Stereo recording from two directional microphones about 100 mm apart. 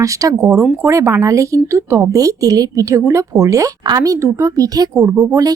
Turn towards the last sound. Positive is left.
turn(degrees=-35)  # may be behind; listen again after turning